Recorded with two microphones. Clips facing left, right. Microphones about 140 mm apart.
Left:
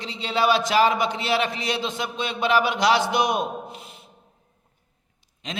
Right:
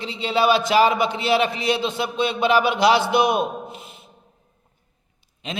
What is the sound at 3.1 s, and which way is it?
Speech, 5° right (ahead or behind).